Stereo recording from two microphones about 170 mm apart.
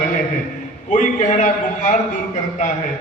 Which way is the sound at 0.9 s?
45° left (ahead or behind).